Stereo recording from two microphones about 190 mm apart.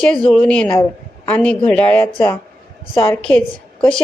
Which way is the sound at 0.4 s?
5° left (ahead or behind).